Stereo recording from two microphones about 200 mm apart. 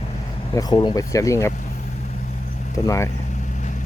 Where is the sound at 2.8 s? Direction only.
15° left (ahead or behind).